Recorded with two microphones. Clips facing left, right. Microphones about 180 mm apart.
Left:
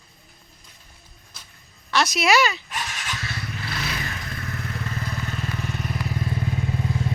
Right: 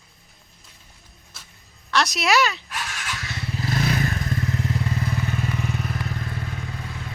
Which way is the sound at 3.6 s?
45° right (ahead or behind).